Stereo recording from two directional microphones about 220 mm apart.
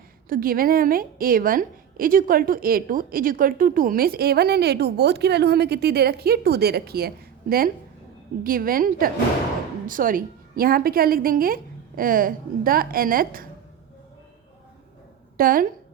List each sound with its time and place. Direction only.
0.3 s a woman's voice: 40° right (ahead or behind)
8.4 s a woman's voice: 40° right (ahead or behind)
15.4 s a woman's voice: 40° right (ahead or behind)